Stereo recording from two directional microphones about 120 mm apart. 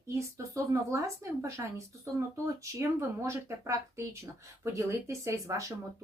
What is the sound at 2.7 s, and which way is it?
Speech, 20° right (ahead or behind).